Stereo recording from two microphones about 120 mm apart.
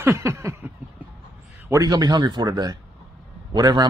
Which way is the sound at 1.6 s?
30° right (ahead or behind).